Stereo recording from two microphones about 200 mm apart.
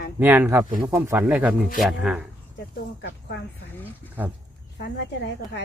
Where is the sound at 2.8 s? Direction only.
60° left (ahead or behind).